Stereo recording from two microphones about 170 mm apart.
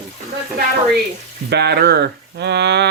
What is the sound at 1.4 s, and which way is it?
Speech, 75° right (ahead or behind).